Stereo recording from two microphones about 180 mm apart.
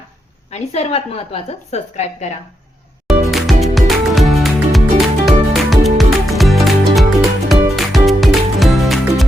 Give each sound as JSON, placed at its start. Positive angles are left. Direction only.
{"t": 0.5, "sound": "a woman's voice", "side_deg": 35}
{"t": 3.3, "sound": "music", "side_deg": 0}